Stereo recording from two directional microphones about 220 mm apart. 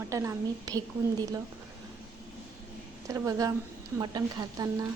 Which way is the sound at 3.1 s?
15° right (ahead or behind).